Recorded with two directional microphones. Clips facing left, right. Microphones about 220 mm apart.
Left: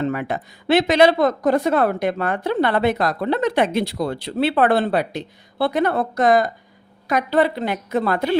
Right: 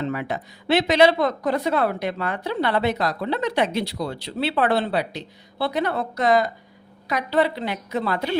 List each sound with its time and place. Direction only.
0.0 s speech: 50° left (ahead or behind)